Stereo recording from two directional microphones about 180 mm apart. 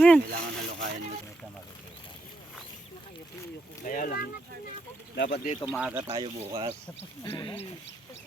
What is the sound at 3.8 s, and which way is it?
Speech, 50° left (ahead or behind).